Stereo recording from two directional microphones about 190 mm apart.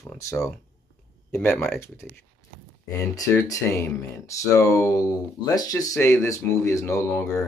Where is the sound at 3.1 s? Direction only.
15° left (ahead or behind).